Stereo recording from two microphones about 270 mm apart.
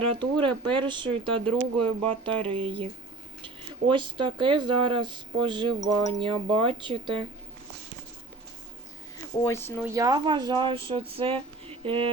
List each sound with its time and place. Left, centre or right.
0.2 s speech: centre
9.4 s speech: centre
9.8 s speech: centre